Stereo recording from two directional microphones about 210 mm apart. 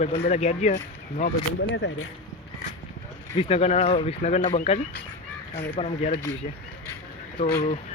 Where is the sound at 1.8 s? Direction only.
60° left (ahead or behind).